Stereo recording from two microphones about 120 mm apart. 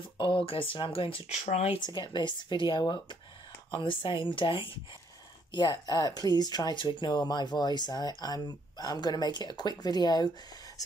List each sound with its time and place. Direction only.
0.2 s speech: 50° left (ahead or behind)
1.3 s speech: 70° left (ahead or behind)
1.8 s speech: 40° left (ahead or behind)